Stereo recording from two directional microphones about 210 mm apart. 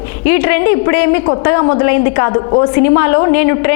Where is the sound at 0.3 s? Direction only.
15° left (ahead or behind).